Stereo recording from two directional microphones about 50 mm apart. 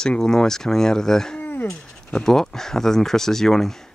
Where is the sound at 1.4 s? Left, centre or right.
Left.